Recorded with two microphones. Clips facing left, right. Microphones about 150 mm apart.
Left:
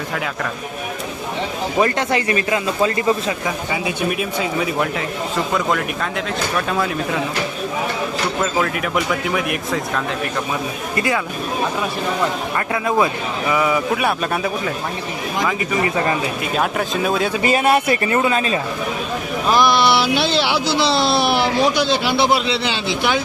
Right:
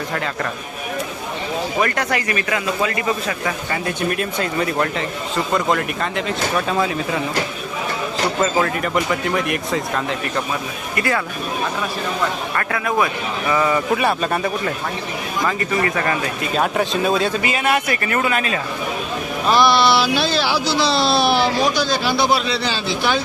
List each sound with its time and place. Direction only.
1.8 s speech: 25° left (ahead or behind)
3.4 s speech: 5° left (ahead or behind)
8.4 s speech: centre (ahead or behind)
10.9 s speech: 20° left (ahead or behind)
12.5 s speech: 20° left (ahead or behind)
13.5 s speech: 5° left (ahead or behind)
15.8 s speech: 20° left (ahead or behind)
16.4 s speech: centre (ahead or behind)
17.4 s speech: 35° left (ahead or behind)
19.8 s speech: 20° left (ahead or behind)